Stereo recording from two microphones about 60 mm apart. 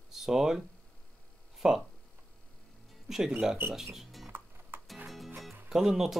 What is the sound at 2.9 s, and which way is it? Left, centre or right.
Music, centre.